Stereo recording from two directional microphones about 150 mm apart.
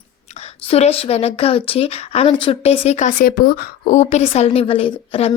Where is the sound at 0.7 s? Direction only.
40° left (ahead or behind); by 3.9 s 80° left.